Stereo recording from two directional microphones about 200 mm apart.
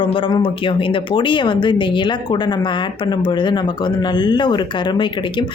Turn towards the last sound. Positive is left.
turn(degrees=20)  # may be behind; listen again after turning